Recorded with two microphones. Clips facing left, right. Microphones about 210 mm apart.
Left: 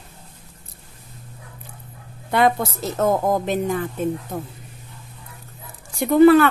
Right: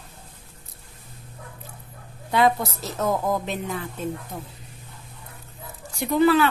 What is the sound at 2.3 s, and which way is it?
A woman's voice, 55° left (ahead or behind).